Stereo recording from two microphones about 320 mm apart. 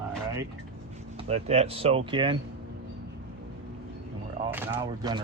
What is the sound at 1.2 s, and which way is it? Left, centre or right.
Speech, centre.